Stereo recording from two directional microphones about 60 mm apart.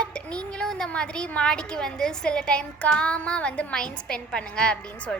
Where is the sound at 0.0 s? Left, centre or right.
Centre.